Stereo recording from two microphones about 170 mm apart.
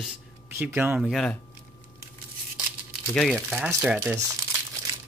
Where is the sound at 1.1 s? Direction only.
5° left (ahead or behind).